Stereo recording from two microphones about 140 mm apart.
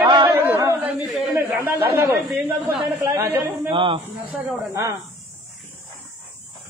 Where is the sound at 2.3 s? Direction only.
5° right (ahead or behind).